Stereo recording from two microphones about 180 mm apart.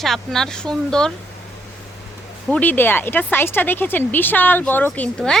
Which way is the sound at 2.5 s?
10° left (ahead or behind).